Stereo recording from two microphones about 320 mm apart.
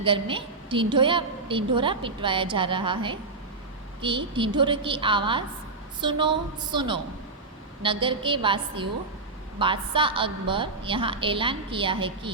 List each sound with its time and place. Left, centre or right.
0.0 s a woman's voice: centre